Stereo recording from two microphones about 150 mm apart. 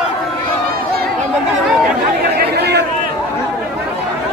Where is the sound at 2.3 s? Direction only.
90° right.